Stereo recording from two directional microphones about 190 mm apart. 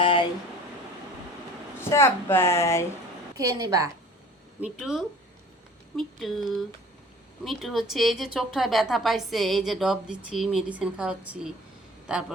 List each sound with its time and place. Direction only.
0.0 s a sound: 25° left (ahead or behind)
1.8 s speech: 15° left (ahead or behind)
3.3 s a woman's voice: 20° right (ahead or behind)
4.6 s a woman's voice: centre (ahead or behind)